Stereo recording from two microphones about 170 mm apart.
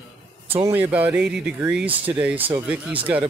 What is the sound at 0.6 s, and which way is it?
Speech, 10° right (ahead or behind).